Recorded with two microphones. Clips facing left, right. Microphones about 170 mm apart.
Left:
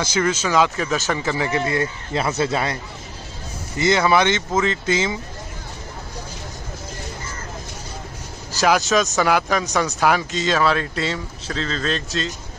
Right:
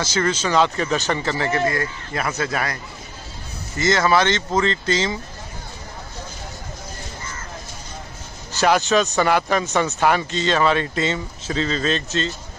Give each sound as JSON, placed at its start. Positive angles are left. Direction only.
{"t": 0.0, "sound": "speech", "side_deg": 10}
{"t": 3.7, "sound": "speech", "side_deg": 15}
{"t": 8.5, "sound": "speech", "side_deg": 0}